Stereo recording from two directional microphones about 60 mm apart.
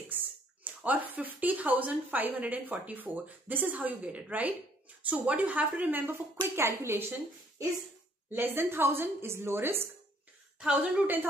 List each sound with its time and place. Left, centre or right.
0.1 s a sound: right
0.7 s speech: right
6.5 s speech: right
8.3 s a woman's voice: right
10.6 s speech: centre